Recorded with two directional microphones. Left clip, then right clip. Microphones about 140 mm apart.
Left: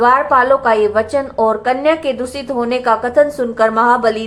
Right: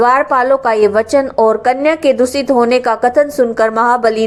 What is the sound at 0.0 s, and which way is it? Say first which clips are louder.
A woman's voice: even; 35° right (ahead or behind).